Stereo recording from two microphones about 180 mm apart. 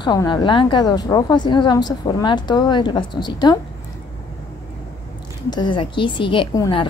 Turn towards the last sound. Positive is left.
turn(degrees=25)  # may be behind; listen again after turning